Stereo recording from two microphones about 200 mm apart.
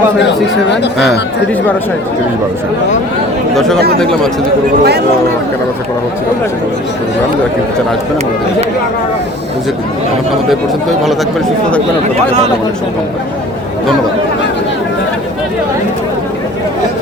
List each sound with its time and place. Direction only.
0.2 s speech: 60° left (ahead or behind)
3.5 s speech: centre (ahead or behind)
4.8 s speech: 55° right (ahead or behind)